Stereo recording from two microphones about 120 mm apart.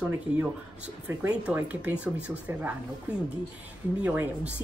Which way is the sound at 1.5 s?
10° right (ahead or behind).